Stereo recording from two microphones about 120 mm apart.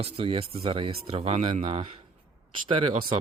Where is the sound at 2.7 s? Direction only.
50° right (ahead or behind).